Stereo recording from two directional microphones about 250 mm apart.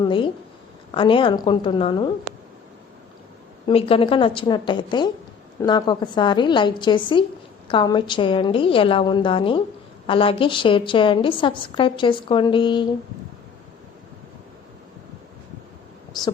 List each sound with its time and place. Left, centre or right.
0.0 s a woman's voice: centre
3.7 s a woman's voice: left